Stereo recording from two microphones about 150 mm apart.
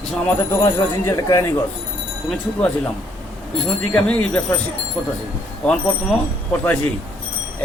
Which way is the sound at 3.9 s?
10° left (ahead or behind).